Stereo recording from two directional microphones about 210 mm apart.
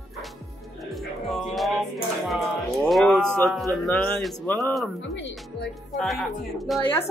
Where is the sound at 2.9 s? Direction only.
Centre (ahead or behind).